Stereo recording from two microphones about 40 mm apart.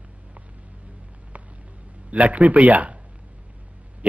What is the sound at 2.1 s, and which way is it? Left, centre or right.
Speech, right.